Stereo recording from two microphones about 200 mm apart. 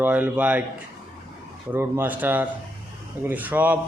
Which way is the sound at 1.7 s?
10° right (ahead or behind).